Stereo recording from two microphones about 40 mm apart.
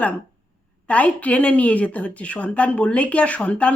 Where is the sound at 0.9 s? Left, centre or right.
Left.